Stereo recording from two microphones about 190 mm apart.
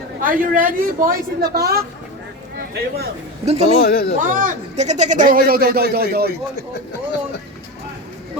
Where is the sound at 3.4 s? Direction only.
35° right (ahead or behind).